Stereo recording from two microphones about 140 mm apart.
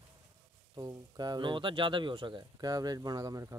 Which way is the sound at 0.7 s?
30° right (ahead or behind).